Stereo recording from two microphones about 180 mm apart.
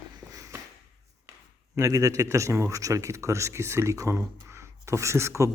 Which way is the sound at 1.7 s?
15° right (ahead or behind).